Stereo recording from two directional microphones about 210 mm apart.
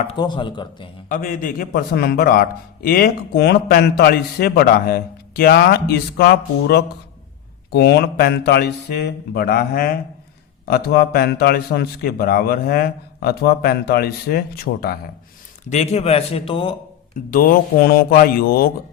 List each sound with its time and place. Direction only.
0.0 s a man's voice: 25° left (ahead or behind)
1.0 s a man's voice: 40° left (ahead or behind)
15.7 s a man's voice: 30° left (ahead or behind)
17.2 s a man's voice: 40° left (ahead or behind)